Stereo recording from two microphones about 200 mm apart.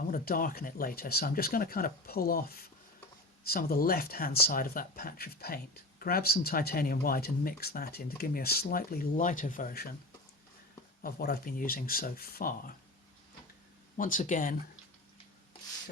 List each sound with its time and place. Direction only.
0.1 s speech: 45° left (ahead or behind)
3.4 s speech: 50° left (ahead or behind)
11.0 s speech: 50° left (ahead or behind)
13.9 s speech: 40° left (ahead or behind)